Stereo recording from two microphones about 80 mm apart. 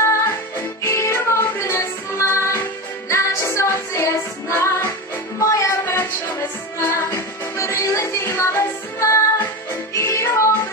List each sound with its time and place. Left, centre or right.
0.6 s music: left